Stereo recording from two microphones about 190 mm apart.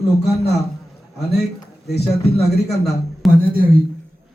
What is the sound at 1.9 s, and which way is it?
Speech, 60° left (ahead or behind).